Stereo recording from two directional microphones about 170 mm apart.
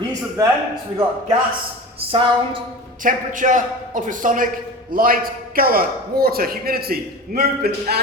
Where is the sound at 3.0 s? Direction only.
50° right (ahead or behind).